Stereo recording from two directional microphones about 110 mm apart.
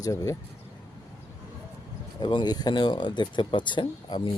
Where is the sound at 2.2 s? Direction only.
45° left (ahead or behind).